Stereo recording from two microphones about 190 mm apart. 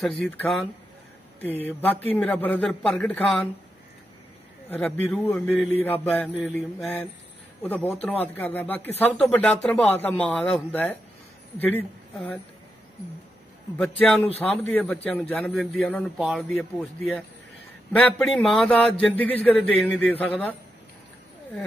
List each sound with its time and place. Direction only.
0.0 s a man's voice: centre (ahead or behind)
1.7 s speech: 10° left (ahead or behind)
4.6 s speech: 10° left (ahead or behind)
13.7 s a man's voice: 5° left (ahead or behind)
17.9 s a man's voice: 5° left (ahead or behind)